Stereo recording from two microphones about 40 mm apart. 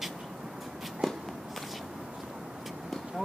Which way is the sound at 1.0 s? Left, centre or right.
Centre.